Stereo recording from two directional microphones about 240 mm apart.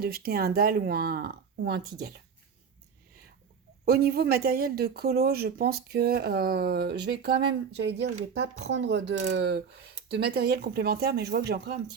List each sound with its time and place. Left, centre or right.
0.0 s speech: right
3.8 s speech: right